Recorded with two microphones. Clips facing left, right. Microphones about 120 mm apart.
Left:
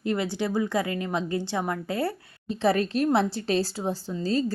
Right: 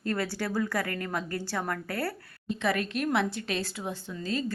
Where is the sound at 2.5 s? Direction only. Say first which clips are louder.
Left 5 dB; 35° left (ahead or behind).